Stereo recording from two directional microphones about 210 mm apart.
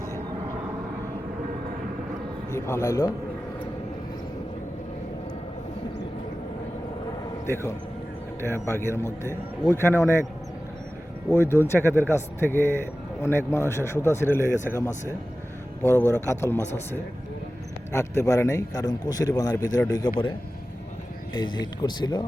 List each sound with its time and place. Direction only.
2.5 s a man's voice: 10° left (ahead or behind)
7.4 s a man's voice: 15° left (ahead or behind)
11.3 s a man's voice: 10° left (ahead or behind)
17.9 s a man's voice: 15° left (ahead or behind)
21.5 s speech: 20° left (ahead or behind)